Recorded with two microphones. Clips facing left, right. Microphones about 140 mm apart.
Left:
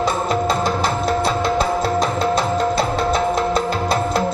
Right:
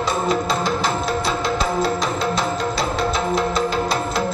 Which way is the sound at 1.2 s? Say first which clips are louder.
Left 3 dB; 50° left (ahead or behind).